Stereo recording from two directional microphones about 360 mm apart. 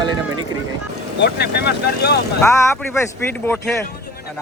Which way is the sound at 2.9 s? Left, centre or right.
Centre.